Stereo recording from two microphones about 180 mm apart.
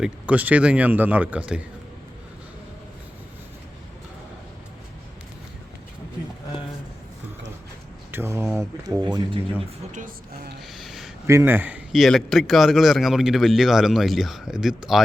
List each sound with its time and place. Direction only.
0.0 s speech: 10° right (ahead or behind)
8.1 s speech: 15° right (ahead or behind)
9.9 s speech: 45° right (ahead or behind)
10.8 s a sound: centre (ahead or behind)
11.3 s a man's voice: 15° right (ahead or behind)